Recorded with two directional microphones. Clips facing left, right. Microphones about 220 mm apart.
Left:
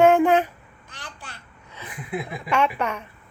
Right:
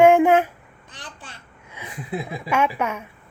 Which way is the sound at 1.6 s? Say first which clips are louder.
Right 2 dB; 10° right (ahead or behind).